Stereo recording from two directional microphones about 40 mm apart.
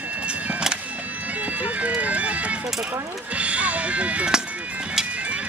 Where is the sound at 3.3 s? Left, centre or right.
Right.